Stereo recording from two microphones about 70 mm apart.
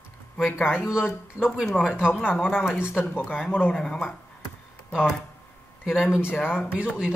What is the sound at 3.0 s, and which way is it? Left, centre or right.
Speech, left.